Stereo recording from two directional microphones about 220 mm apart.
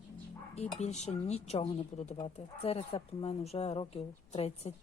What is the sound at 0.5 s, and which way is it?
Speech, 30° left (ahead or behind).